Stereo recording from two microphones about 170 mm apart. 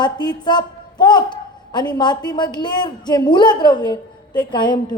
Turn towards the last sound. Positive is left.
turn(degrees=25)  # may be behind; listen again after turning